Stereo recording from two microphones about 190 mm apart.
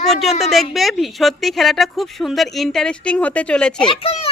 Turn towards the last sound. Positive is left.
turn(degrees=30)  # may be behind; listen again after turning